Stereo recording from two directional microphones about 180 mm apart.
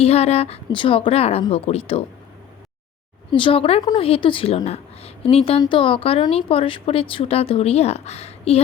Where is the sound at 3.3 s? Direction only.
30° left (ahead or behind).